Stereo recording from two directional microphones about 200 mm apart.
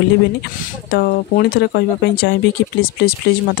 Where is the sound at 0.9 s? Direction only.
50° left (ahead or behind).